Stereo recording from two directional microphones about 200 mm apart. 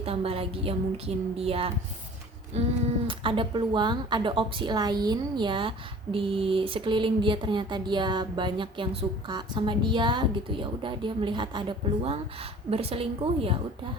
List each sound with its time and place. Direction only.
0.0 s a woman's voice: 30° right (ahead or behind)
2.5 s a sound: 35° right (ahead or behind)
3.1 s a woman's voice: 25° right (ahead or behind)
12.7 s a woman's voice: 30° right (ahead or behind)